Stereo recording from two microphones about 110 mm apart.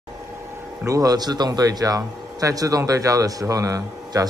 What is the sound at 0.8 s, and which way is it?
Speech, 35° right (ahead or behind).